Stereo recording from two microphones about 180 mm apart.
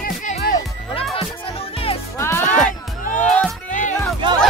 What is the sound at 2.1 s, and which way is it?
Music, 15° left (ahead or behind).